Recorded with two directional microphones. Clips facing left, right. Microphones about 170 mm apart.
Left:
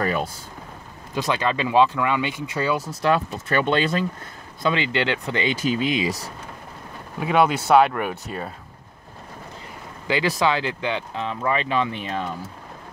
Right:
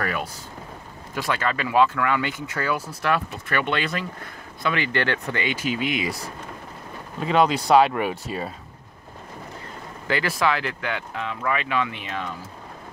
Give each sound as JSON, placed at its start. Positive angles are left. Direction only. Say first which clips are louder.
{"t": 0.0, "sound": "speech", "louder": "left 4 dB", "side_deg": 25}
{"t": 7.2, "sound": "speech", "louder": "left 1 dB", "side_deg": 5}
{"t": 10.0, "sound": "speech", "louder": "left 2 dB", "side_deg": 15}